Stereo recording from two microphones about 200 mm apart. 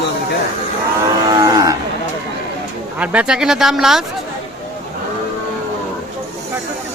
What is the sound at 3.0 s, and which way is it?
Speech, 5° right (ahead or behind).